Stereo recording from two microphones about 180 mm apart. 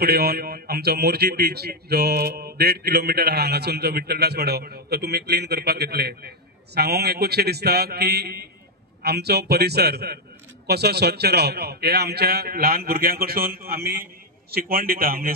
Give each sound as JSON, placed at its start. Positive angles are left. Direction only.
{"t": 0.0, "sound": "a man's voice", "side_deg": -60}